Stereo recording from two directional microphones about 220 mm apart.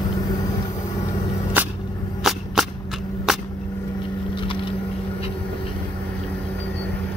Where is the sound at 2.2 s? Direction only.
Centre (ahead or behind).